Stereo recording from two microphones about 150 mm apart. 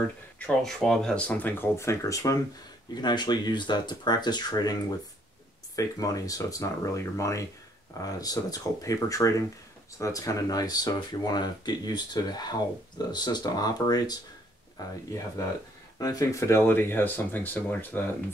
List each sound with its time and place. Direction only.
0.4 s speech: 5° left (ahead or behind); by 4.7 s 25° left (ahead or behind)
5.8 s speech: 25° left (ahead or behind)
16.0 s speech: 25° left (ahead or behind)